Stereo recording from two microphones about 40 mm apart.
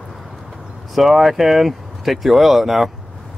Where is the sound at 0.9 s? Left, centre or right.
Centre.